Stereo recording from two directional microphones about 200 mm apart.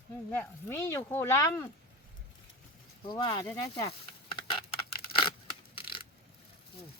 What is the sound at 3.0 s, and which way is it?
Speech, 20° left (ahead or behind).